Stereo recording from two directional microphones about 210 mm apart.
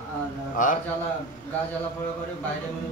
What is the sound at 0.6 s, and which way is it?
Speech, 40° left (ahead or behind).